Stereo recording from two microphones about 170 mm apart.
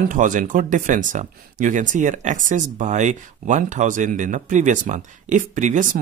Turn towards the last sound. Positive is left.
turn(degrees=-50)  # may be behind; listen again after turning